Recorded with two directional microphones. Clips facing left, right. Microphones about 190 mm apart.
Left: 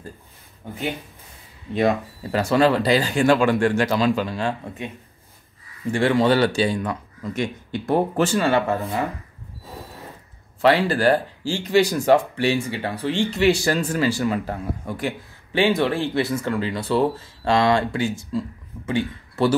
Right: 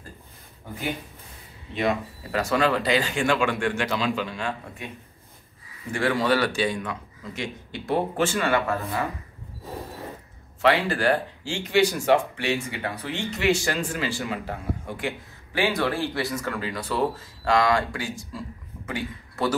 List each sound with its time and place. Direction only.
1.8 s speech: 35° left (ahead or behind)
5.9 s speech: 25° left (ahead or behind)
9.7 s a sound: 15° right (ahead or behind)
10.6 s speech: 35° left (ahead or behind)
15.5 s a man's voice: 25° left (ahead or behind)